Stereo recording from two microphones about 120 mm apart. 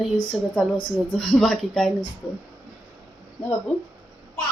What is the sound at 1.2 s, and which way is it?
Speech, 5° left (ahead or behind).